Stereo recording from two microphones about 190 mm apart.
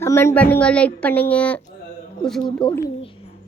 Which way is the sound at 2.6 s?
25° left (ahead or behind).